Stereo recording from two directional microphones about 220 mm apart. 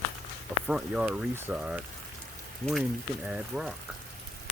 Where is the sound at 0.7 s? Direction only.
5° right (ahead or behind).